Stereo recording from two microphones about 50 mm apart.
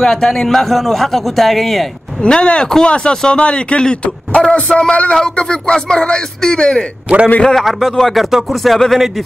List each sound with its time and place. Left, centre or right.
0.0 s a man's voice: centre
2.2 s speech: left
7.4 s a man's voice: centre